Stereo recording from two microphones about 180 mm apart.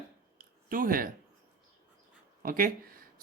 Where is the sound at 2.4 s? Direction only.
50° right (ahead or behind).